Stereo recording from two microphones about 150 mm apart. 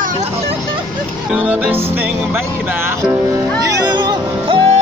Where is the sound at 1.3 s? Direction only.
10° right (ahead or behind).